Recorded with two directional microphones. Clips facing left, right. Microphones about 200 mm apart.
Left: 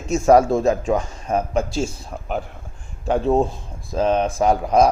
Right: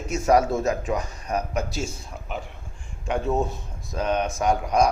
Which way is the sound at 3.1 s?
30° left (ahead or behind).